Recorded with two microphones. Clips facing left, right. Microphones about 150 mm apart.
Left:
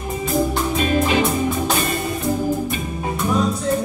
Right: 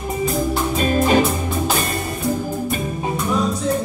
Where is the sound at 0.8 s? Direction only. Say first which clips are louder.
Right 3 dB; 45° right (ahead or behind).